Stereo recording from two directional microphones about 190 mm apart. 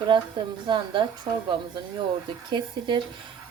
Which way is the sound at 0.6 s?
25° right (ahead or behind).